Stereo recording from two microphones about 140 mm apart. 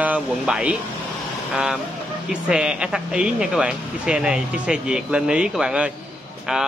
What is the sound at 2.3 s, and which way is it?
Speech, 5° right (ahead or behind).